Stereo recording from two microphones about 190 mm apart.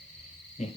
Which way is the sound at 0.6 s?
35° left (ahead or behind).